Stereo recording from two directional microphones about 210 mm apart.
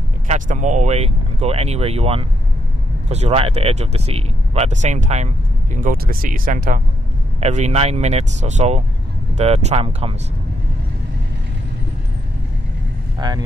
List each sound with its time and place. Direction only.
0.3 s speech: 35° right (ahead or behind)
13.2 s speech: 20° right (ahead or behind)